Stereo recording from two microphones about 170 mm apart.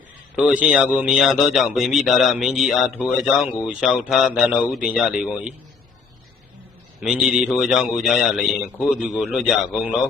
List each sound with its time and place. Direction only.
0.3 s a man's voice: 10° right (ahead or behind)
7.0 s a man's voice: 5° right (ahead or behind)